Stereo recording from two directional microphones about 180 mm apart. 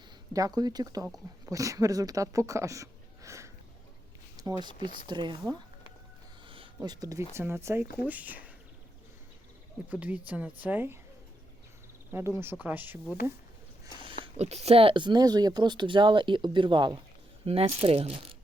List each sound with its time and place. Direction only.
0.3 s speech: 20° right (ahead or behind)
6.8 s speech: 20° right (ahead or behind)
9.9 s speech: 10° right (ahead or behind)
12.1 s speech: 15° right (ahead or behind)
14.3 s speech: 35° right (ahead or behind)